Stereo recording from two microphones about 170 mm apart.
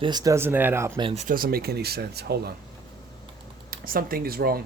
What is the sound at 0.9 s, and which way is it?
Speech, 30° right (ahead or behind).